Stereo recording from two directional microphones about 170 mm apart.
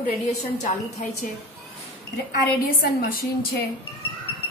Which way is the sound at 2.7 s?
60° left (ahead or behind).